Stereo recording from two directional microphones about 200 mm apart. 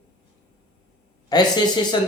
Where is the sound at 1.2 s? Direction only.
20° left (ahead or behind).